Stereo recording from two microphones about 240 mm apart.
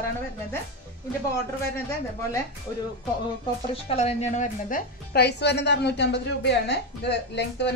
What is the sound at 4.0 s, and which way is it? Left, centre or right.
A woman's voice, left.